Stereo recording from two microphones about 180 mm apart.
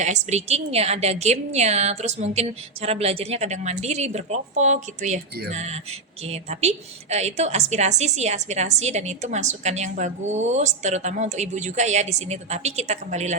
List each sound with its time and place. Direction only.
0.0 s a woman's voice: 40° right (ahead or behind)